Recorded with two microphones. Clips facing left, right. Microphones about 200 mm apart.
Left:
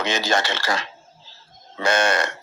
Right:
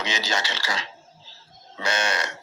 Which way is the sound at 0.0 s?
55° left (ahead or behind).